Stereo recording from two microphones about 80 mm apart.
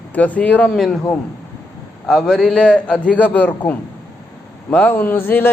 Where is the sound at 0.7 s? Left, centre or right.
Centre; by 5.5 s left.